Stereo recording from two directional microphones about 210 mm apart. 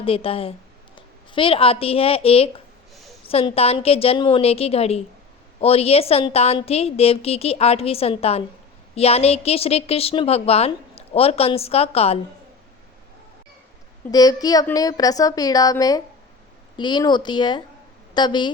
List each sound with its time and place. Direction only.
0.0 s a woman's voice: 25° left (ahead or behind)
14.1 s a woman's voice: 20° left (ahead or behind)